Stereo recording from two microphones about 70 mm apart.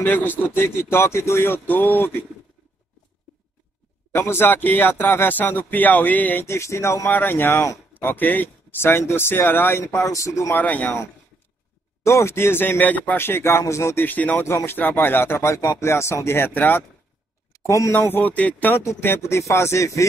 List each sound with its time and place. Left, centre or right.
0.0 s speech: left
4.1 s speech: left
6.4 s speech: left
7.1 s speech: left
9.9 s speech: left
10.5 s speech: left
12.0 s speech: left
13.9 s speech: left
14.4 s speech: left
14.8 s speech: left
17.6 s speech: left
17.9 s speech: left
18.9 s speech: left